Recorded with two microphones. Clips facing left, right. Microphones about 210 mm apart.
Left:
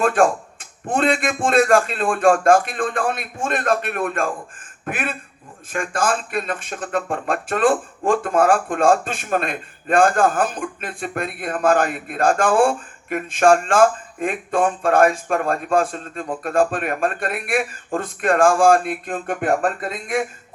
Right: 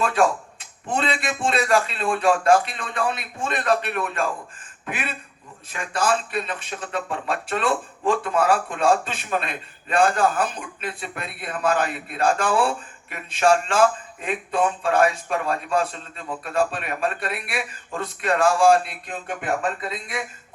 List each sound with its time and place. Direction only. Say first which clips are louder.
0.0 s speech: left 4 dB; 50° left (ahead or behind)